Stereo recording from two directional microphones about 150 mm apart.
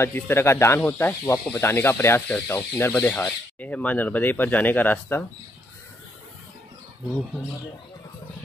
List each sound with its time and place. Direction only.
0.0 s speech: 15° left (ahead or behind)